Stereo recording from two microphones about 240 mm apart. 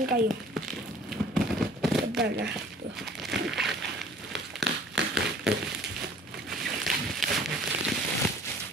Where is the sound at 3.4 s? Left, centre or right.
Centre.